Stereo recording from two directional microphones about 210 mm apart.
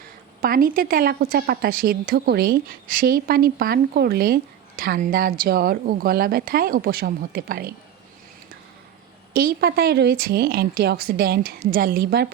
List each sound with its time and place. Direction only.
0.4 s a woman's voice: 45° right (ahead or behind)
9.3 s a woman's voice: 45° right (ahead or behind)